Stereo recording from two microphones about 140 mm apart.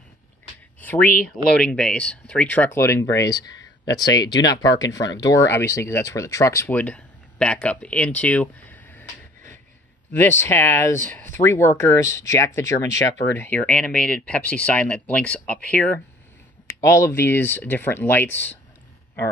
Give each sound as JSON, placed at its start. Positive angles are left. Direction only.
{"t": 0.7, "sound": "a sound", "side_deg": 10}
{"t": 1.0, "sound": "speech", "side_deg": 90}
{"t": 1.5, "sound": "speech", "side_deg": 5}
{"t": 6.8, "sound": "speech", "side_deg": 10}
{"t": 10.1, "sound": "speech", "side_deg": 15}
{"t": 16.8, "sound": "speech", "side_deg": 20}